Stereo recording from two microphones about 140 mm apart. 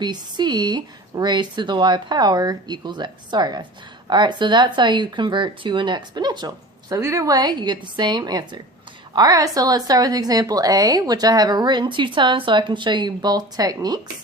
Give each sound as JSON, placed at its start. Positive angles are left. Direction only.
{"t": 0.0, "sound": "a woman's voice", "side_deg": -30}